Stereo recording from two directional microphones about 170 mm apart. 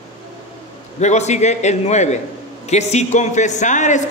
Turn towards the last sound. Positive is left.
turn(degrees=45)  # may be behind; listen again after turning